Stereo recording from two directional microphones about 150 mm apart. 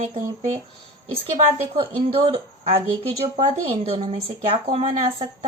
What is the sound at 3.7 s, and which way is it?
Speech, 35° right (ahead or behind).